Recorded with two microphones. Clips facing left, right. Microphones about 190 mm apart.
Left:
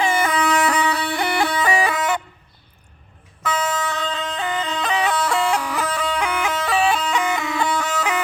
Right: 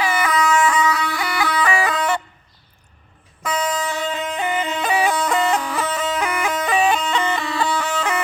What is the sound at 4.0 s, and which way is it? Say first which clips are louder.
Music: right 2 dB; 20° right (ahead or behind).